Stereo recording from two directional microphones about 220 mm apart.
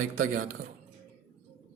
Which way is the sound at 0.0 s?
40° right (ahead or behind).